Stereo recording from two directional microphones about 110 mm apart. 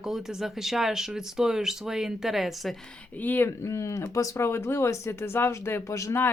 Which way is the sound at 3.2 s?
20° left (ahead or behind).